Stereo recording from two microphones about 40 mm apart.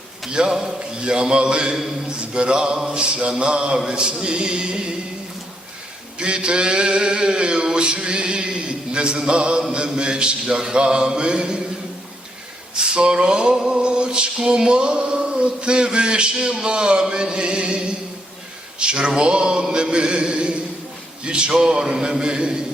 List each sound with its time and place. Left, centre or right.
0.3 s male singing: right
6.1 s male singing: right
12.7 s a sound: right
13.6 s male singing: right